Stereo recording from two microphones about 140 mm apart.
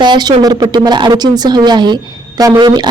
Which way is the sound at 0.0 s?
30° right (ahead or behind).